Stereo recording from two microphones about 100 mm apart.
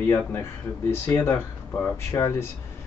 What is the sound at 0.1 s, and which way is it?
Speech, 25° left (ahead or behind).